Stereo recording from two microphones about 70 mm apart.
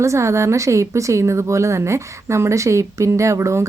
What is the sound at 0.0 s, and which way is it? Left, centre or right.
Speech, right.